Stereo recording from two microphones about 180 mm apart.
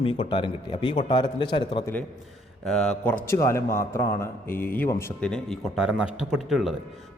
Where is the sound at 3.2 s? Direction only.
15° left (ahead or behind).